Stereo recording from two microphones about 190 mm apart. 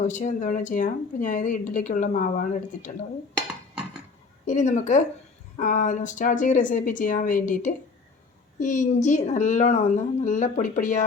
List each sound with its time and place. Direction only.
0.0 s speech: 40° left (ahead or behind)
4.4 s a woman's voice: 40° left (ahead or behind)